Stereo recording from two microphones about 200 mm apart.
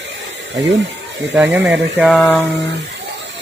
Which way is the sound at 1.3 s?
5° right (ahead or behind).